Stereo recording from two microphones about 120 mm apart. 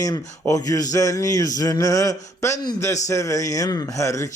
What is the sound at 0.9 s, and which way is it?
Speech, 30° left (ahead or behind).